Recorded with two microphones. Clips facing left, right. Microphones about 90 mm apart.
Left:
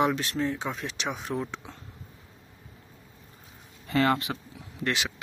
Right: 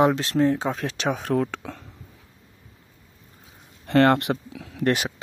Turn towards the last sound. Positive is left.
turn(degrees=-45)  # may be behind; listen again after turning